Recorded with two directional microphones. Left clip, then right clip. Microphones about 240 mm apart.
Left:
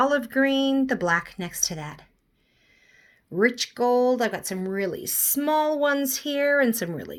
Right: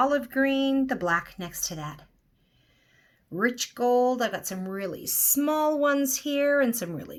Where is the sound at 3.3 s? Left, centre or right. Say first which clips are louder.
Left 4 dB; left.